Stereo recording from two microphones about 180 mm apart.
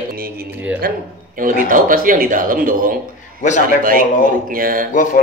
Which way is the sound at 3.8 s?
50° right (ahead or behind).